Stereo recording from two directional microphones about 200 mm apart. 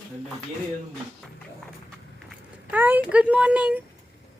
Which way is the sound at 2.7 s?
10° right (ahead or behind).